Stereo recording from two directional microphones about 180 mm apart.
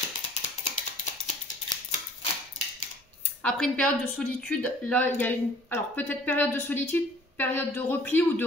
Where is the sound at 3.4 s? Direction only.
5° left (ahead or behind).